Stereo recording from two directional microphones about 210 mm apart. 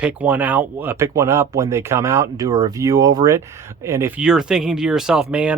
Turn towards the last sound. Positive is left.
turn(degrees=-5)  # may be behind; listen again after turning